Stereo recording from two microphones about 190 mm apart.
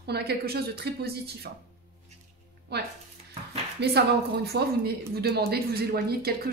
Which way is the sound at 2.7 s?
65° right (ahead or behind).